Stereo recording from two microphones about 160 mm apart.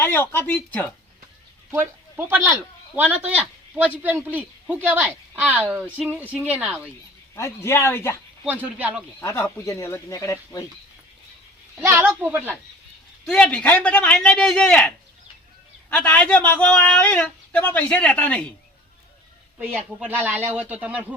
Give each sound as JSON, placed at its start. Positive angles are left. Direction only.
{"t": 0.0, "sound": "a man's voice", "side_deg": 15}
{"t": 1.7, "sound": "a man's voice", "side_deg": -15}
{"t": 7.3, "sound": "a man's voice", "side_deg": 15}
{"t": 8.4, "sound": "speech", "side_deg": -10}
{"t": 9.2, "sound": "speech", "side_deg": 20}
{"t": 11.9, "sound": "speech", "side_deg": -10}
{"t": 13.2, "sound": "a man's voice", "side_deg": 5}
{"t": 19.5, "sound": "speech", "side_deg": -10}